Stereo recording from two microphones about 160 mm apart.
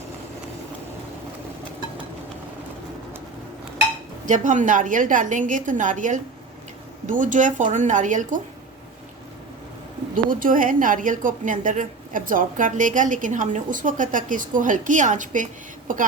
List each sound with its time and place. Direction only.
4.3 s a woman's voice: 50° right (ahead or behind)
10.2 s a woman's voice: 60° right (ahead or behind)